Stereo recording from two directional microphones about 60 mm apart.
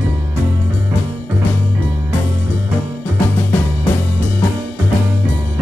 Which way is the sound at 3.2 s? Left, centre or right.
Left.